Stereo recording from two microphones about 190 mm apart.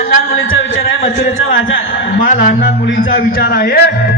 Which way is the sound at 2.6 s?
75° left (ahead or behind).